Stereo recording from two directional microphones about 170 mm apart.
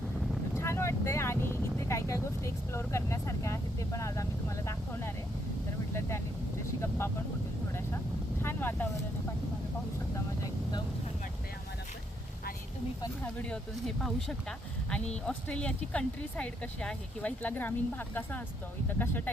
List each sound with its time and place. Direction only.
0.5 s vehicle: 15° left (ahead or behind)
5.9 s speech: 15° left (ahead or behind)
8.4 s vehicle: 15° left (ahead or behind)
10.4 s vehicle: 25° left (ahead or behind)
13.2 s speech: 5° left (ahead or behind)